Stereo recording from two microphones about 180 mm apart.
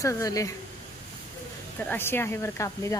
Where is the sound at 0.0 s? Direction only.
20° left (ahead or behind).